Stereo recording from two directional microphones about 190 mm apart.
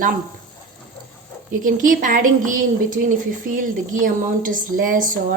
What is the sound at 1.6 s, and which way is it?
Speech, 45° right (ahead or behind).